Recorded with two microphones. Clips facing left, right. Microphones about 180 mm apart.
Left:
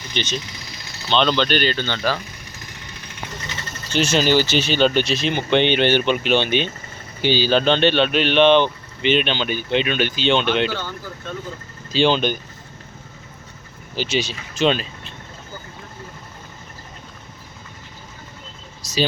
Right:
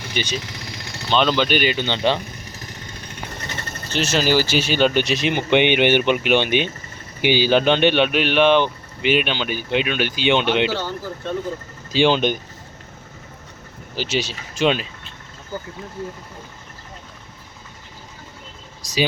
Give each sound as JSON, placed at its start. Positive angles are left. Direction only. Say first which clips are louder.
{"t": 0.0, "sound": "speech", "louder": "even", "side_deg": -10}
{"t": 3.3, "sound": "mechanisms", "louder": "right 1 dB", "side_deg": -55}
{"t": 3.9, "sound": "speech", "louder": "left 1 dB", "side_deg": 0}
{"t": 10.8, "sound": "speech", "louder": "right 4 dB", "side_deg": -40}
{"t": 11.9, "sound": "speech", "louder": "right 1 dB", "side_deg": -15}
{"t": 13.9, "sound": "speech", "louder": "left 1 dB", "side_deg": -10}
{"t": 18.8, "sound": "vehicle", "louder": "even", "side_deg": -15}